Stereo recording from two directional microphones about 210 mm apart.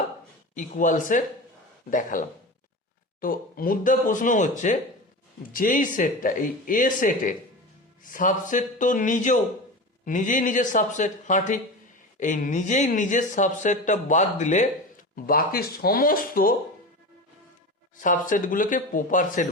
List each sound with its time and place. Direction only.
0.5 s speech: 40° left (ahead or behind)
17.9 s speech: 40° left (ahead or behind)